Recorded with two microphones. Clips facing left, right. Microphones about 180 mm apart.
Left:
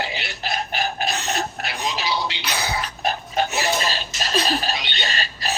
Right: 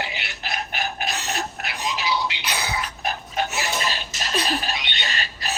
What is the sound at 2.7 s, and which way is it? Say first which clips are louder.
Dog: left 3 dB; 30° left (ahead or behind).